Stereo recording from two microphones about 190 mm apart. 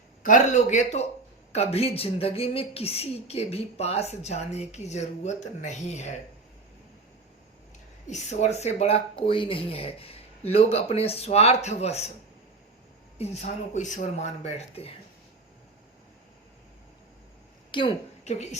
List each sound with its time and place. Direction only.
0.2 s speech: 40° left (ahead or behind)
8.0 s speech: 35° left (ahead or behind)
13.1 s speech: 35° left (ahead or behind)
17.7 s a woman's voice: 25° left (ahead or behind)